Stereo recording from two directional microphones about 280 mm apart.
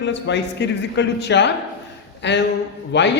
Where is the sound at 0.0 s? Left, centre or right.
Left.